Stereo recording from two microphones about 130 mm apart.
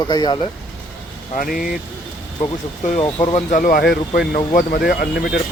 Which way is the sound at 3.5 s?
90° left.